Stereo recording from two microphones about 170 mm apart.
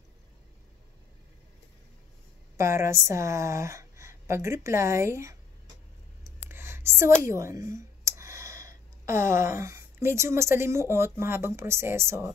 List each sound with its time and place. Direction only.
2.5 s a woman's voice: 15° right (ahead or behind)
6.4 s speech: 15° right (ahead or behind)